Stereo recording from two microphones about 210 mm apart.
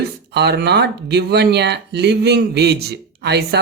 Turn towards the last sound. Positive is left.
turn(degrees=-50)  # may be behind; listen again after turning